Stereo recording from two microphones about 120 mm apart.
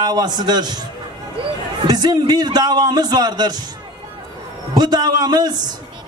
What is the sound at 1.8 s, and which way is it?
A man's voice, 35° right (ahead or behind).